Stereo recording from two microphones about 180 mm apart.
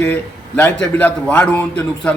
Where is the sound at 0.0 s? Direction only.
10° left (ahead or behind).